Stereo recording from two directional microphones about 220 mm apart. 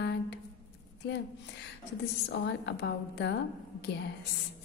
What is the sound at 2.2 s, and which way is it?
A woman's voice, 50° left (ahead or behind).